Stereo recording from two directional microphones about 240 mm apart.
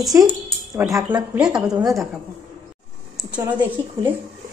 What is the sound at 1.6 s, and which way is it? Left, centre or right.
Speech, centre.